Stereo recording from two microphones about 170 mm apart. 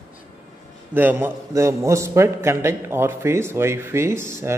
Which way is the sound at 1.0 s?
10° right (ahead or behind).